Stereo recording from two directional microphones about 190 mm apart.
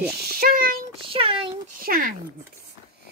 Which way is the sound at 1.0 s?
30° right (ahead or behind).